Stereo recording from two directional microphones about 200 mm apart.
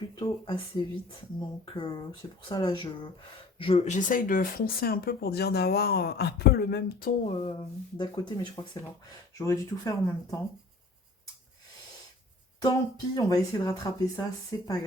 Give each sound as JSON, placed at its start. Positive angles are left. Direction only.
{"t": 0.2, "sound": "speech", "side_deg": 25}
{"t": 7.3, "sound": "a sound", "side_deg": 30}
{"t": 7.5, "sound": "speech", "side_deg": 20}
{"t": 12.6, "sound": "speech", "side_deg": 15}